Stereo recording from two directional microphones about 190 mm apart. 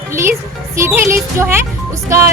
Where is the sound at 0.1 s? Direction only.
15° right (ahead or behind).